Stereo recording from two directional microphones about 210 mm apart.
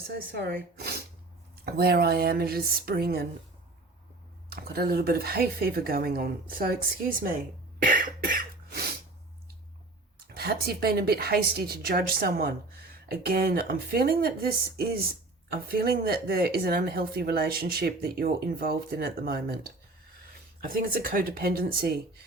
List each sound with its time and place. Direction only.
0.2 s speech: 45° right (ahead or behind)
4.5 s speech: 45° right (ahead or behind)
7.9 s cough: 40° right (ahead or behind)
10.2 s speech: 50° right (ahead or behind)